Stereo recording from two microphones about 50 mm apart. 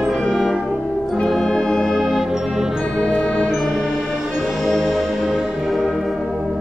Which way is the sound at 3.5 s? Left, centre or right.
Centre.